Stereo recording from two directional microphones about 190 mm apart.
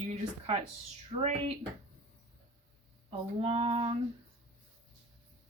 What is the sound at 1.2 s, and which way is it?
Speech, 35° right (ahead or behind).